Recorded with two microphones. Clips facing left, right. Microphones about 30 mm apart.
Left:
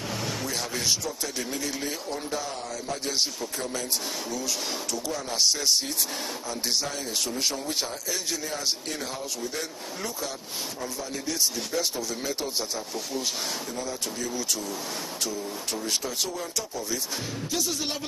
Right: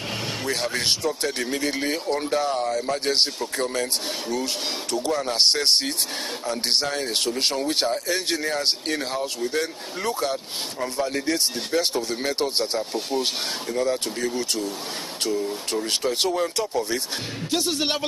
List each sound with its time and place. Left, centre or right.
0.5 s speech: right
4.3 s speech: right
15.9 s speech: right